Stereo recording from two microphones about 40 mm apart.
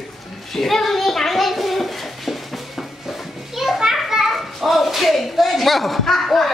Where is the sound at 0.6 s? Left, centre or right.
Centre.